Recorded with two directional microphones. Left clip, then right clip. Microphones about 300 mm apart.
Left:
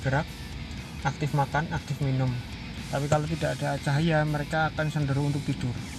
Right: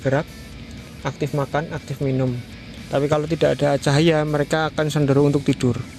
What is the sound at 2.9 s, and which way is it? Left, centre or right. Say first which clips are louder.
Speech: right 8 dB; right.